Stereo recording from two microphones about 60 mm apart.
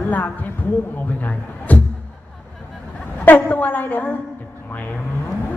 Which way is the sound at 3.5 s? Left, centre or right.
Left.